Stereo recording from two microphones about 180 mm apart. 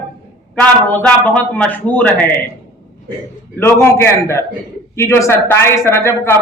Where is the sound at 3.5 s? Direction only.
15° left (ahead or behind).